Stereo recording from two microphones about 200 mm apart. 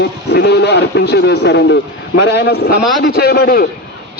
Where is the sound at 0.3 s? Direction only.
55° left (ahead or behind).